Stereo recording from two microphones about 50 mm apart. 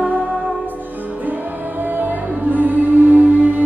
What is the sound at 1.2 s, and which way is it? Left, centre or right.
Music, right.